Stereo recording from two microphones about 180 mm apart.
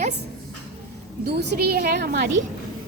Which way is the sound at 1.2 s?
65° right (ahead or behind).